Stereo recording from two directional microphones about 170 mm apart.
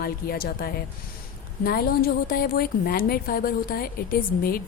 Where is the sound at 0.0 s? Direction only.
65° left (ahead or behind).